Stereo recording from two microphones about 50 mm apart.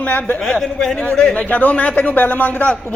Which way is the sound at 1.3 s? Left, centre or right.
Left.